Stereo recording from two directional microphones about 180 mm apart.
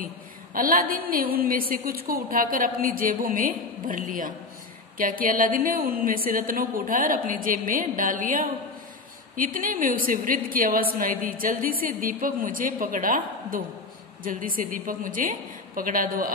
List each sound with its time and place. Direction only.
0.6 s a woman's voice: 50° right (ahead or behind)